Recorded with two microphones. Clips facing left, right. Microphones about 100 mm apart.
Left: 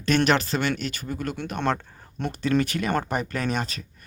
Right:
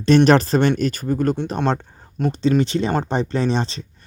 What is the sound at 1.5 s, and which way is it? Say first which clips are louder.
Speech: right 4 dB; 20° right (ahead or behind).